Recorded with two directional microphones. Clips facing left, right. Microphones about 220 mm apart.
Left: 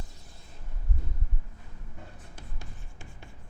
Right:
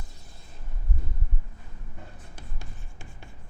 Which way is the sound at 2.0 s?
15° right (ahead or behind).